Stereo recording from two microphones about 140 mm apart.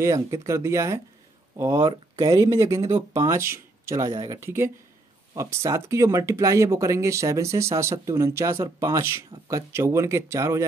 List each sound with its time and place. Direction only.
0.0 s speech: 20° right (ahead or behind)
2.1 s speech: 25° right (ahead or behind)